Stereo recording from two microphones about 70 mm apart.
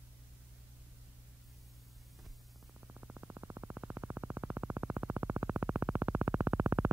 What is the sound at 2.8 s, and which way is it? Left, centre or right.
Synthesizer, right.